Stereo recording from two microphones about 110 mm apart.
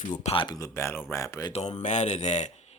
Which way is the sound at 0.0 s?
90° left.